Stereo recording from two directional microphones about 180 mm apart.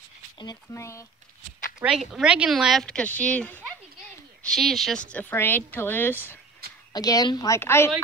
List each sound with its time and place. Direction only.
0.4 s a woman's voice: 20° left (ahead or behind)
1.8 s a woman's voice: centre (ahead or behind); by 7.9 s 15° left (ahead or behind)